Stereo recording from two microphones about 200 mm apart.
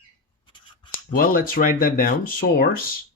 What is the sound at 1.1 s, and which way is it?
Speech, 45° left (ahead or behind).